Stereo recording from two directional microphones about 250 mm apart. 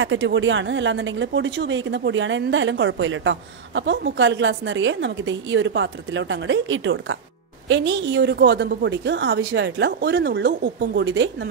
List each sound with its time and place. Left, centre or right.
0.0 s a woman's voice: right